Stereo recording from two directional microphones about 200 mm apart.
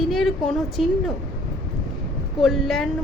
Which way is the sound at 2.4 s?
Centre (ahead or behind).